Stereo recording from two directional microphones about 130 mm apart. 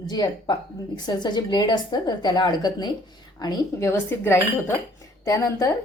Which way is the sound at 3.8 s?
20° left (ahead or behind).